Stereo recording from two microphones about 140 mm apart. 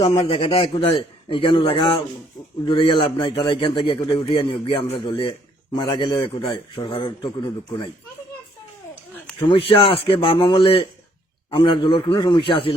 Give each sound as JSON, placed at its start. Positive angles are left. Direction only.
{"t": 0.0, "sound": "a man's voice", "side_deg": 35}
{"t": 9.5, "sound": "a man's voice", "side_deg": 40}